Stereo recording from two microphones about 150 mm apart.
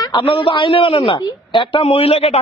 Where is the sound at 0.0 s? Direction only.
35° left (ahead or behind).